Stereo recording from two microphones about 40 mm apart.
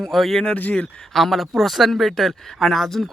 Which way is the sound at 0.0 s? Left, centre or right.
Centre.